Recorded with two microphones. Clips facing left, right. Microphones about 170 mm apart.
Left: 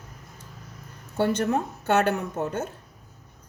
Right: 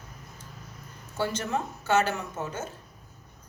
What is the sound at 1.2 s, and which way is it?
Speech, 60° left (ahead or behind).